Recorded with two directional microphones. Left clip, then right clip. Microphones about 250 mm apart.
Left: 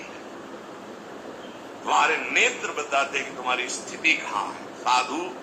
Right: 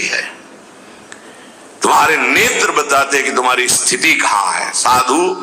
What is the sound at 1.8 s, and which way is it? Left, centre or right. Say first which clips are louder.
Music: right 11 dB; right.